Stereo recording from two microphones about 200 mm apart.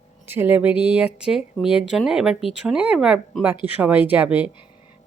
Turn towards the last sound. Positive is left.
turn(degrees=-10)  # may be behind; listen again after turning